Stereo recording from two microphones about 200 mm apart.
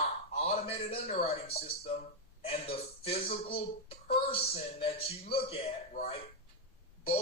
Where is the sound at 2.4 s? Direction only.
30° left (ahead or behind).